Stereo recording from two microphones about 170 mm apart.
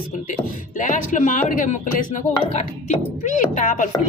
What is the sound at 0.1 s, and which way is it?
Speech, 50° left (ahead or behind).